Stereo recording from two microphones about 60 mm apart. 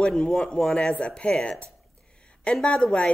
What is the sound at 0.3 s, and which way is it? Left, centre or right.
Speech, centre.